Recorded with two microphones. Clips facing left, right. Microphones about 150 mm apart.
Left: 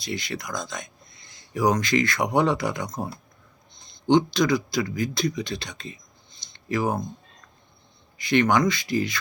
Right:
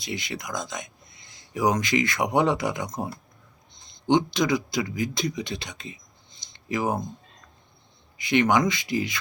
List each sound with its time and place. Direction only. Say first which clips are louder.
0.0 s speech: left 2 dB; 20° right (ahead or behind)
8.2 s speech: left 1 dB; 15° right (ahead or behind)